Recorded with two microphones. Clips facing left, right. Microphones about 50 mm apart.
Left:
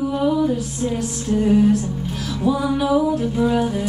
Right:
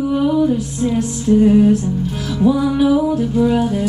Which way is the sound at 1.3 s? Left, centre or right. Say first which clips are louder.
Right 5 dB; centre.